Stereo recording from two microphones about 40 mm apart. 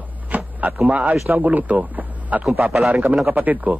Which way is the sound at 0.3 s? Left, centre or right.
Right.